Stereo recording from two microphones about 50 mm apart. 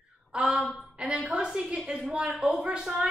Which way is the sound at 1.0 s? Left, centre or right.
Right.